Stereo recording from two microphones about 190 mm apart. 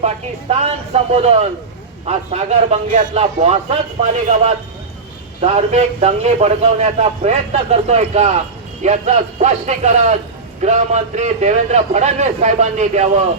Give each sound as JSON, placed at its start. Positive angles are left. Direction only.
{"t": 0.6, "sound": "a man's voice", "side_deg": -35}